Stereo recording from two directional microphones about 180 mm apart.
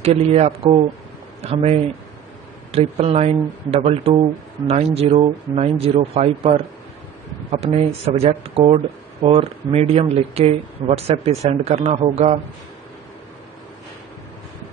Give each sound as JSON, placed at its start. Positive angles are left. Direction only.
{"t": 0.0, "sound": "speech", "side_deg": -35}
{"t": 7.6, "sound": "speech", "side_deg": -35}